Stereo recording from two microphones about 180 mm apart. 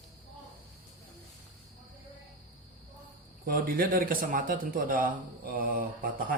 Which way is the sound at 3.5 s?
55° right (ahead or behind).